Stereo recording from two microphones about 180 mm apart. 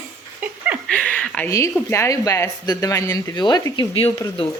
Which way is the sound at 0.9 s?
5° left (ahead or behind).